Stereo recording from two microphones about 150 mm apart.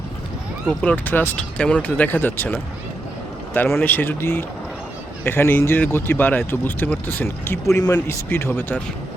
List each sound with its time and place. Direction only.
0.8 s speech: 10° left (ahead or behind)